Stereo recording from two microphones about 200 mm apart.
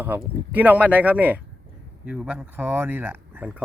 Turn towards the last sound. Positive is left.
turn(degrees=-10)  # may be behind; listen again after turning